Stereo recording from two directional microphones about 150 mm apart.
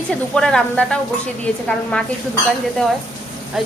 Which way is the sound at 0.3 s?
5° left (ahead or behind).